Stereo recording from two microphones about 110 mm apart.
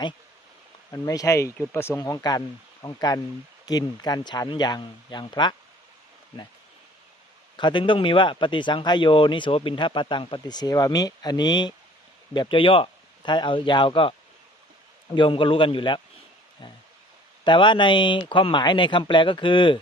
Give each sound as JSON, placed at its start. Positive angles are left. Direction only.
{"t": 0.9, "sound": "speech", "side_deg": 30}
{"t": 2.0, "sound": "speech", "side_deg": 35}
{"t": 7.5, "sound": "speech", "side_deg": 45}
{"t": 17.4, "sound": "speech", "side_deg": 45}